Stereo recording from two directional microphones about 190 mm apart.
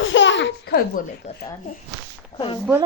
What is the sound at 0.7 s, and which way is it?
Speech, 45° left (ahead or behind).